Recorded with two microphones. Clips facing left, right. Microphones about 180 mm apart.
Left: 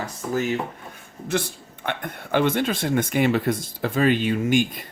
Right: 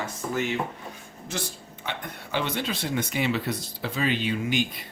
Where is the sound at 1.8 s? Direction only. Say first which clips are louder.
Left 6 dB; 55° left (ahead or behind).